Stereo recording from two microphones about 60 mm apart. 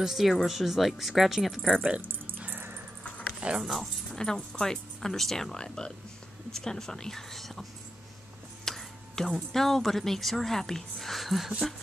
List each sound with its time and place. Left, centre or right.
0.0 s speech: centre
2.0 s dog: right
3.3 s dog: centre
4.1 s speech: centre
8.6 s speech: centre